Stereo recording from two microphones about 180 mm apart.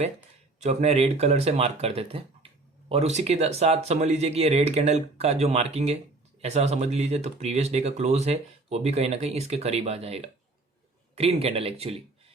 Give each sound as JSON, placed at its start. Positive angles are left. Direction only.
{"t": 0.6, "sound": "speech", "side_deg": -40}